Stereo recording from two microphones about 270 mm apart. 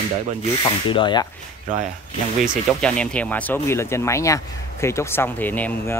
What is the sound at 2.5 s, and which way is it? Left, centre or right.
Speech, centre.